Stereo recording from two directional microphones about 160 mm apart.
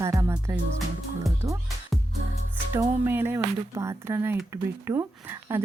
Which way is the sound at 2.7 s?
15° right (ahead or behind).